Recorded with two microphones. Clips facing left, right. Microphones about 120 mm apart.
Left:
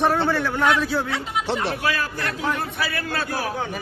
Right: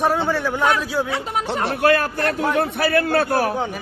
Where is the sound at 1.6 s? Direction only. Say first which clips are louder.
Right 7 dB; 55° right (ahead or behind).